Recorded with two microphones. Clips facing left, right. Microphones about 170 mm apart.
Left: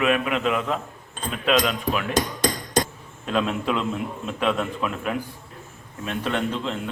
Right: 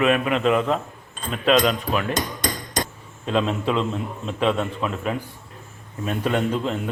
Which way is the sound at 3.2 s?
Centre (ahead or behind).